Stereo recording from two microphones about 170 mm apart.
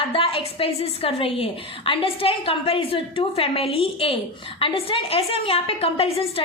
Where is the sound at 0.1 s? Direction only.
30° left (ahead or behind).